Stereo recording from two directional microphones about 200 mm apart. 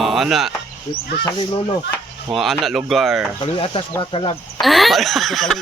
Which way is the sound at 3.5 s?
25° left (ahead or behind).